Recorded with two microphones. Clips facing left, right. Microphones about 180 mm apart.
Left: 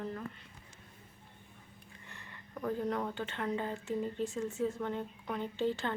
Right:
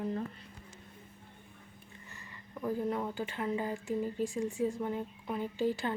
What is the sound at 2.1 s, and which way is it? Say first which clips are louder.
Speech: left 1 dB; 5° right (ahead or behind).